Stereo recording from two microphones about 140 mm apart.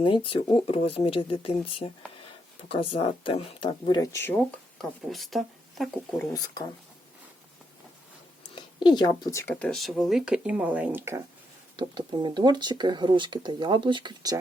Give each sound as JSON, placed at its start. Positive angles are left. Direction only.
{"t": 0.3, "sound": "speech", "side_deg": 40}
{"t": 3.8, "sound": "speech", "side_deg": 25}
{"t": 4.8, "sound": "speech", "side_deg": 0}
{"t": 6.3, "sound": "speech", "side_deg": 25}
{"t": 8.4, "sound": "speech", "side_deg": 30}
{"t": 11.8, "sound": "speech", "side_deg": -35}